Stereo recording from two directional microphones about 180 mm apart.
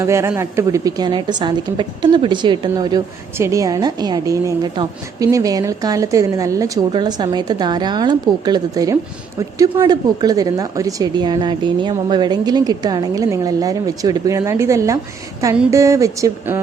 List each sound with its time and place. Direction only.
0.0 s a woman's voice: 15° right (ahead or behind)